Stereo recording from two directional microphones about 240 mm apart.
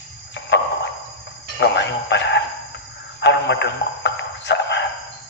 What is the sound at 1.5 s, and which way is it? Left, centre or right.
Doorbell, left.